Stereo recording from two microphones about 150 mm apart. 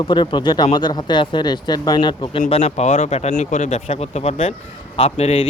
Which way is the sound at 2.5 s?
45° left (ahead or behind).